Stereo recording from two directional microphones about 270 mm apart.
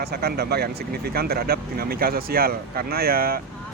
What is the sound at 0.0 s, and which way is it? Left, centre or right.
Speech, right.